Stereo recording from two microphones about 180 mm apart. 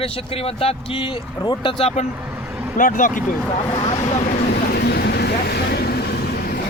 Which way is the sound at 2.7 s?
45° left (ahead or behind).